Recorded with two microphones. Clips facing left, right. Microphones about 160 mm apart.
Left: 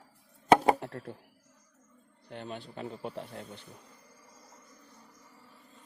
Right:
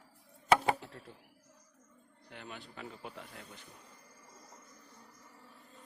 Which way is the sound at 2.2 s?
35° left (ahead or behind).